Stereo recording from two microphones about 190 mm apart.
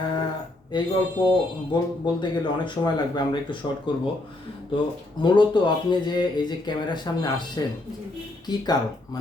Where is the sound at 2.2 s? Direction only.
25° left (ahead or behind).